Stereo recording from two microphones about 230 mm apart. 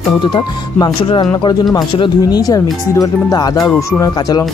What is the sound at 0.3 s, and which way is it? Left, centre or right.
Speech, centre.